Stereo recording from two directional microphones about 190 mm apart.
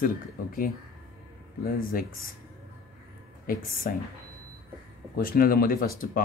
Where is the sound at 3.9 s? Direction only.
50° left (ahead or behind).